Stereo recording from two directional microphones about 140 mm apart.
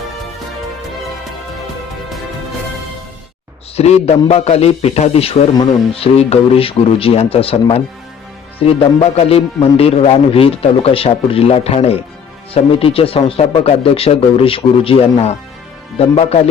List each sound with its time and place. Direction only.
3.8 s speech: 45° left (ahead or behind)